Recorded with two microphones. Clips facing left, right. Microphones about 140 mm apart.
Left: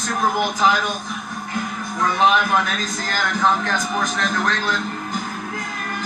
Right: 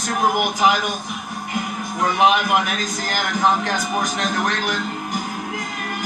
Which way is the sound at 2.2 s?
15° right (ahead or behind).